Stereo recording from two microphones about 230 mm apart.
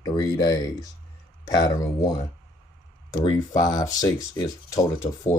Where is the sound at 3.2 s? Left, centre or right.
Centre.